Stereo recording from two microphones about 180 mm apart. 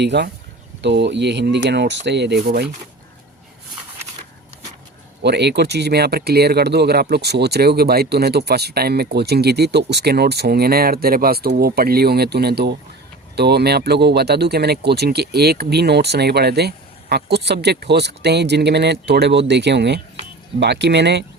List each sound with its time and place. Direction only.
0.0 s speech: 70° right (ahead or behind)
5.2 s speech: 70° right (ahead or behind)